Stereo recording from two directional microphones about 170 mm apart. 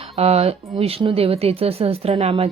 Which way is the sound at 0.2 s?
40° right (ahead or behind).